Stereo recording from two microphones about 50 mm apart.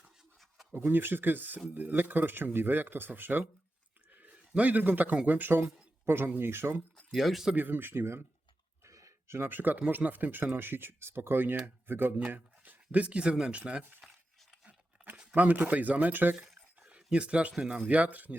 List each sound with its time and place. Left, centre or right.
0.7 s speech: right
6.1 s speech: right
7.1 s speech: centre
7.5 s speech: right
8.8 s a sound: right
9.5 s speech: right
12.3 s speech: right
14.0 s a sound: centre
15.1 s a sound: centre
15.4 s speech: right
16.8 s a sound: right
17.6 s speech: right